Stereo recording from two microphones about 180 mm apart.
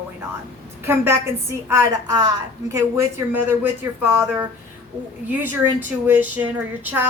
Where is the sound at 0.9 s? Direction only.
15° right (ahead or behind).